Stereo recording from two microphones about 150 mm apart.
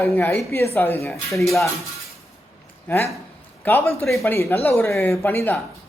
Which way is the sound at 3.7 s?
15° left (ahead or behind).